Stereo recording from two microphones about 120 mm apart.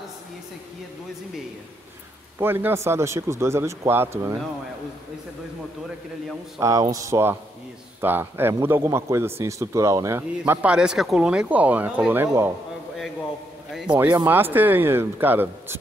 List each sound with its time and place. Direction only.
2.3 s speech: 20° right (ahead or behind)
6.6 s speech: 30° right (ahead or behind)
13.9 s speech: 10° right (ahead or behind)